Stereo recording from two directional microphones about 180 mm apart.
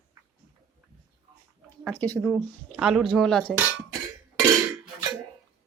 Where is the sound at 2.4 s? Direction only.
Centre (ahead or behind).